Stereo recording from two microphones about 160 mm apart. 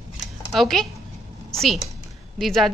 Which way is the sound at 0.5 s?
Centre (ahead or behind).